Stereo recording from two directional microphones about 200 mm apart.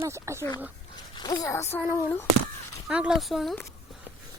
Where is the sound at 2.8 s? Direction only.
5° right (ahead or behind).